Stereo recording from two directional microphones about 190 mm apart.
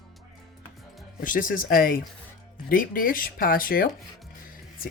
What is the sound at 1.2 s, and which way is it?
Speech, 45° left (ahead or behind).